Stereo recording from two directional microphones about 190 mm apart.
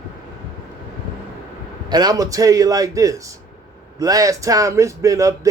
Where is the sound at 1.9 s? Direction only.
20° right (ahead or behind).